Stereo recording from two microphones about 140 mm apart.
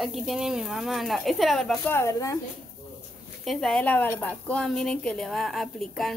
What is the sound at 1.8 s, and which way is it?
Speech, 20° left (ahead or behind).